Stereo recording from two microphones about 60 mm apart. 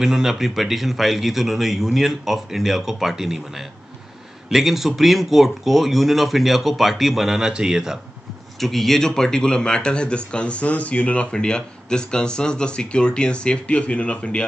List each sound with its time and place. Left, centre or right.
0.0 s a man's voice: centre
8.5 s speech: centre